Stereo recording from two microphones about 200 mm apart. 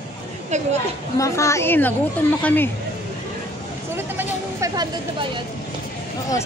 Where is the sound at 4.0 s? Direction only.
15° right (ahead or behind).